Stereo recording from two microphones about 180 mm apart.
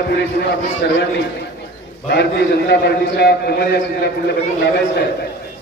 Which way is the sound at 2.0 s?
65° left (ahead or behind).